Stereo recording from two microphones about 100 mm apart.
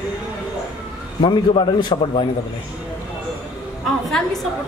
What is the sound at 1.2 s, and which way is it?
A man's voice, 55° left (ahead or behind).